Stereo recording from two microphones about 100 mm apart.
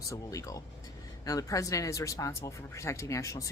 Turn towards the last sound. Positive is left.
turn(degrees=30)  # may be behind; listen again after turning